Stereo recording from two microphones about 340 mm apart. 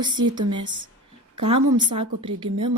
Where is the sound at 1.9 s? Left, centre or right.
Centre.